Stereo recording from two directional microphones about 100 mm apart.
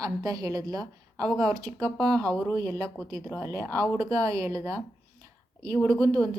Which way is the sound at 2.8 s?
10° left (ahead or behind).